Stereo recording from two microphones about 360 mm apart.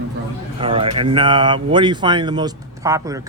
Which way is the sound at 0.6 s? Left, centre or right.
Centre.